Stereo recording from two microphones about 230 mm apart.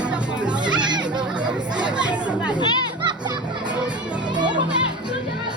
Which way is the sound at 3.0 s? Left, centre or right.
Centre.